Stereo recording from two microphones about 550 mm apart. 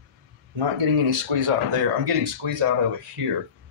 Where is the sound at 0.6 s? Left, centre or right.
Right.